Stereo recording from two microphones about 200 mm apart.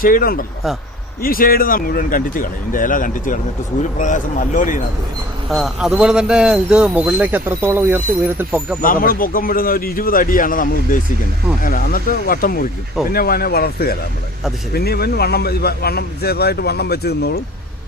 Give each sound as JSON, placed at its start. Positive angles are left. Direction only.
{"t": 0.0, "sound": "a man's voice", "side_deg": 45}
{"t": 5.5, "sound": "speech", "side_deg": 0}
{"t": 8.8, "sound": "a man's voice", "side_deg": 45}